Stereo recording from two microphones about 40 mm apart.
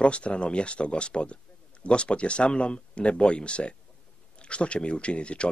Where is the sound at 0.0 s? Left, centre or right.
Left.